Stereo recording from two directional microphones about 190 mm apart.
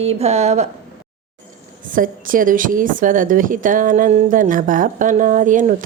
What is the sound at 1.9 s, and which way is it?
Speech, 45° right (ahead or behind).